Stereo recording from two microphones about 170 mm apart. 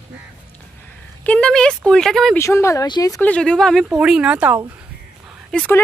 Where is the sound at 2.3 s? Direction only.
15° left (ahead or behind).